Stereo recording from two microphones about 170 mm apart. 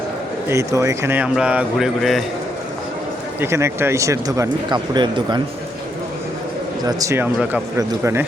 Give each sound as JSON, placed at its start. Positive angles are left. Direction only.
{"t": 0.4, "sound": "speech", "side_deg": -15}
{"t": 3.4, "sound": "speech", "side_deg": -15}
{"t": 6.8, "sound": "speech", "side_deg": -20}